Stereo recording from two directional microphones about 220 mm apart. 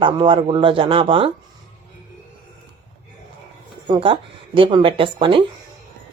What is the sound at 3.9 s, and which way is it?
Speech, 25° right (ahead or behind).